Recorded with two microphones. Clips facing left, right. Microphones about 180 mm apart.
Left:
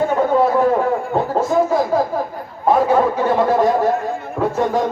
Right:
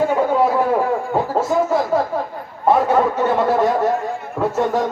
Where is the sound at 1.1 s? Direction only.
5° right (ahead or behind).